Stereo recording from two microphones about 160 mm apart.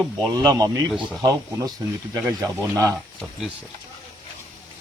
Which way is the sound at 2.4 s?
20° right (ahead or behind).